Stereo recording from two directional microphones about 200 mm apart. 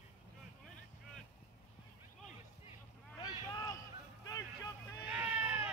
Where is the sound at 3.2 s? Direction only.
20° left (ahead or behind).